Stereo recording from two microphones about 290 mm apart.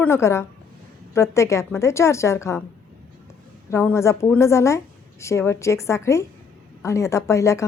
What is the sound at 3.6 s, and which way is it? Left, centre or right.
A woman's voice, centre.